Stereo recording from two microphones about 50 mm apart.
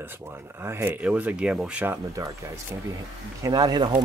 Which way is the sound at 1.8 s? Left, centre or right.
Right.